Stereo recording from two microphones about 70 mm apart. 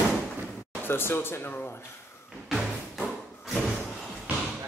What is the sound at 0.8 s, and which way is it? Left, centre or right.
Speech, left.